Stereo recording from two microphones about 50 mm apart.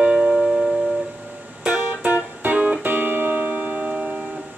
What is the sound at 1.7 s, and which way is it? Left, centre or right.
Music, right.